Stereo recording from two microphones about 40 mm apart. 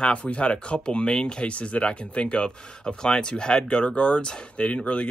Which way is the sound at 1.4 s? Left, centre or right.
Left.